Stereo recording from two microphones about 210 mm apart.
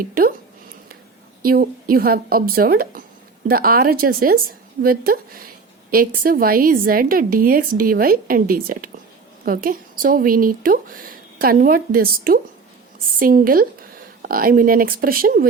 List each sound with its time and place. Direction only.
0.0 s speech: 45° right (ahead or behind)
1.4 s speech: 45° right (ahead or behind)